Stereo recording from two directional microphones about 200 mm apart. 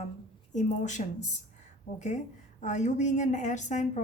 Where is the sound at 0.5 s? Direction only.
35° left (ahead or behind).